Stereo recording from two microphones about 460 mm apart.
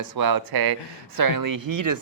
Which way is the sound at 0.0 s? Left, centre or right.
Right.